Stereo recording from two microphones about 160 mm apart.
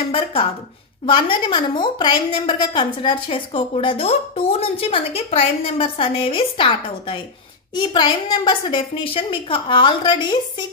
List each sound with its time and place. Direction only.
0.1 s a woman's voice: 35° left (ahead or behind)